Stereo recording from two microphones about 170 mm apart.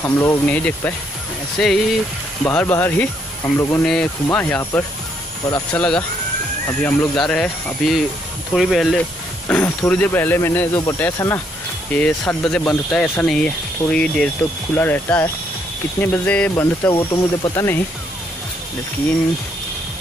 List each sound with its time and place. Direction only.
0.0 s speech: 15° left (ahead or behind)
2.4 s speech: 15° left (ahead or behind)